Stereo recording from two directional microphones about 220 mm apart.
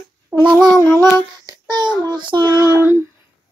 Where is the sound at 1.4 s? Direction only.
20° right (ahead or behind).